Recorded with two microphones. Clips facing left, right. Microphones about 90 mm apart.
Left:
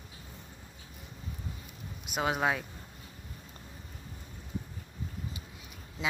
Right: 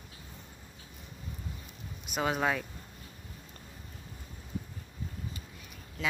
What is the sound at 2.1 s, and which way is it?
Speech, 10° left (ahead or behind).